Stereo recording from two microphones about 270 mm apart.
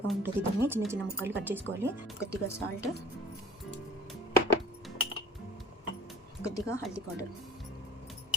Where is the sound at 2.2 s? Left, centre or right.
Centre.